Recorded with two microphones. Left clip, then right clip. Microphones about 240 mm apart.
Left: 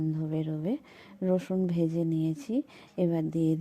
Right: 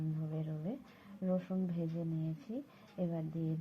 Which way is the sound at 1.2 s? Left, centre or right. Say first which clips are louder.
Left 10 dB; left.